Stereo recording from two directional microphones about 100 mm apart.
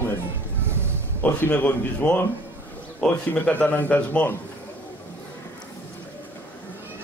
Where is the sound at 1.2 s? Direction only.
20° left (ahead or behind).